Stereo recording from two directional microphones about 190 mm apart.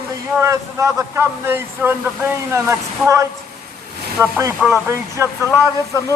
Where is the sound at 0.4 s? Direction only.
15° right (ahead or behind).